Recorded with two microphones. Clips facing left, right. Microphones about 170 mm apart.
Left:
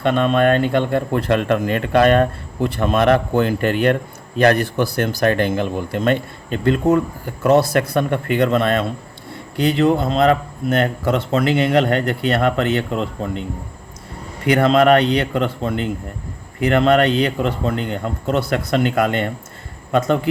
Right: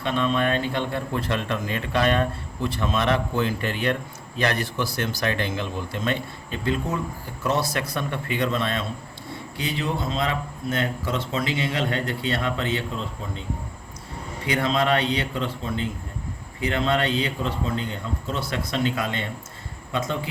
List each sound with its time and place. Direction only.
0.0 s speech: 60° left (ahead or behind)
14.4 s a man's voice: 65° left (ahead or behind)